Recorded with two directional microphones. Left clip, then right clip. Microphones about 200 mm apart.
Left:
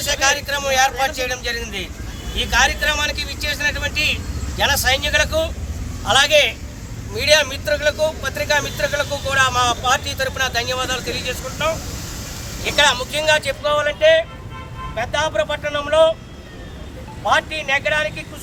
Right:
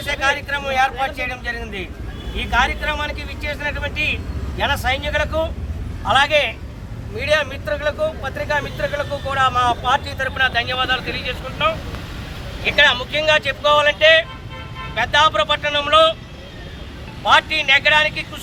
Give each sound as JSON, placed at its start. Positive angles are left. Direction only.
{"t": 0.0, "sound": "a man's voice", "side_deg": -5}
{"t": 17.2, "sound": "speech", "side_deg": -5}